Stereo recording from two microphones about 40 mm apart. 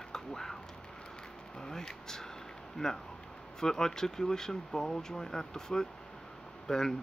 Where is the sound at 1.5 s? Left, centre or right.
Centre.